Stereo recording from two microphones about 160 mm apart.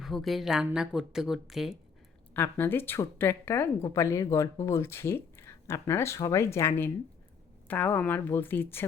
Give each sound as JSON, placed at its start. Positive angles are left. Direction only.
{"t": 0.0, "sound": "a woman's voice", "side_deg": 0}
{"t": 2.3, "sound": "speech", "side_deg": 15}